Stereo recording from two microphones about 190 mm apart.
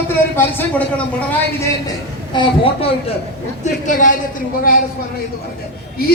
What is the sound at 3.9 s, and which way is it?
Speech, 45° left (ahead or behind).